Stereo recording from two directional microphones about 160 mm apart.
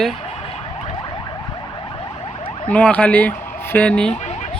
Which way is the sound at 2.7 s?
10° left (ahead or behind).